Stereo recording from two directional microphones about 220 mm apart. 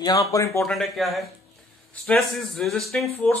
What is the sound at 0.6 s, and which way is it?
Speech, centre (ahead or behind).